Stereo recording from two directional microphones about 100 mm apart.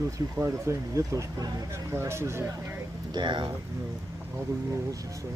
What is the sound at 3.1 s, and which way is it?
Speech, 50° right (ahead or behind).